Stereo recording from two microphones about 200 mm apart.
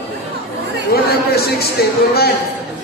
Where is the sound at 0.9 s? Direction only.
50° left (ahead or behind).